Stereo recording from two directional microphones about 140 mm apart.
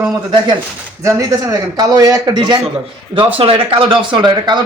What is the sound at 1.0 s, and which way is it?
Speech, 20° right (ahead or behind).